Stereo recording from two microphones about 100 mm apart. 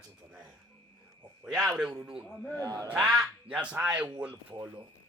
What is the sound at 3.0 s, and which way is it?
Speech, 10° right (ahead or behind).